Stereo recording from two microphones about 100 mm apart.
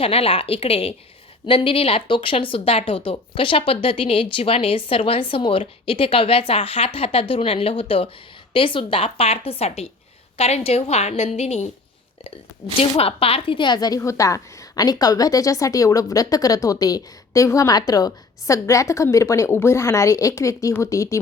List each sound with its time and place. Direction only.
0.0 s a woman's voice: 75° left (ahead or behind)
1.5 s a woman's voice: 65° left (ahead or behind); by 11.7 s 90° left
12.8 s a woman's voice: 75° left (ahead or behind); by 21.2 s 30° left (ahead or behind)